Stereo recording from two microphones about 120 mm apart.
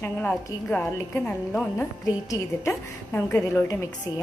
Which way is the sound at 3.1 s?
15° left (ahead or behind).